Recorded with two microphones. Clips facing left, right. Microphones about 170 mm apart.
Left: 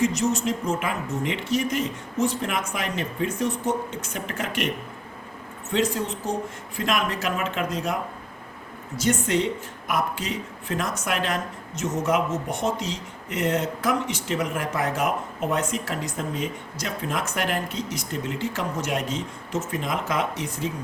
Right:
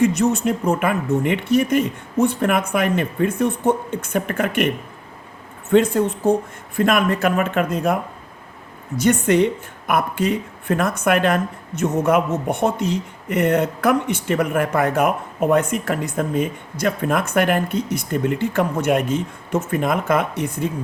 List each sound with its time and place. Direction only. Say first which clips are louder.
0.0 s speech: right 6 dB; 55° right (ahead or behind)
5.7 s speech: right 9 dB; 55° right (ahead or behind)
9.0 s speech: right 7 dB; 60° right (ahead or behind)